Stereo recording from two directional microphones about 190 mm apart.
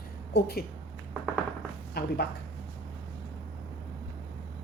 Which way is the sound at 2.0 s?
55° left (ahead or behind).